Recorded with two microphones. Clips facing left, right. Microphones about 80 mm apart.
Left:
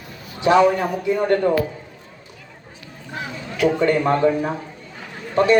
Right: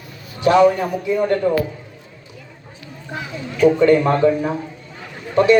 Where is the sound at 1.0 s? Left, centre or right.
Left.